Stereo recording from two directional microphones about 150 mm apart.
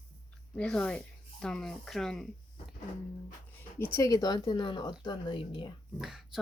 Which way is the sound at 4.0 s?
25° left (ahead or behind).